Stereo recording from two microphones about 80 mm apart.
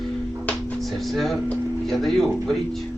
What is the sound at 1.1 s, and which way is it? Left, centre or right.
Speech, centre.